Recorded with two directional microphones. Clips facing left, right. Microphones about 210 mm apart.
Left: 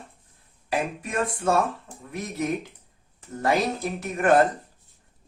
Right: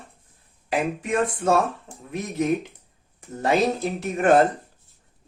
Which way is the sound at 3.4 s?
25° right (ahead or behind).